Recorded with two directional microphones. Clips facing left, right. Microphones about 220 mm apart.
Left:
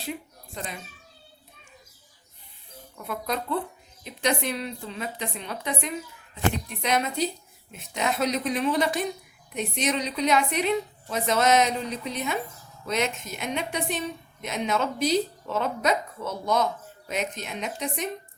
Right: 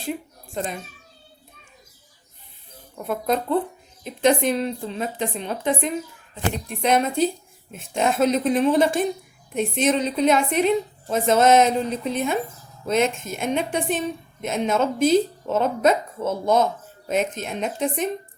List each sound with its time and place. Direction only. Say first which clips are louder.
0.0 s a sound: right 5 dB; 50° right (ahead or behind)
3.0 s a woman's voice: right 7 dB; 45° right (ahead or behind)
4.8 s a woman's voice: right 7 dB; 35° right (ahead or behind)
6.7 s a woman's voice: right 6 dB; 50° right (ahead or behind)
16.2 s speech: right 7 dB; 25° right (ahead or behind)
17.1 s a woman's voice: right 7 dB; 50° right (ahead or behind)